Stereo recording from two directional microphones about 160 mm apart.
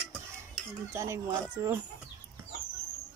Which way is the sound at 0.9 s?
15° right (ahead or behind).